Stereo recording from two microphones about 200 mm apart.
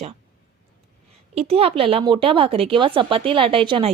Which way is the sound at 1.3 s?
30° right (ahead or behind).